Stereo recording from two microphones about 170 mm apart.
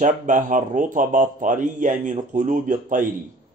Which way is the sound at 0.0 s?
50° right (ahead or behind).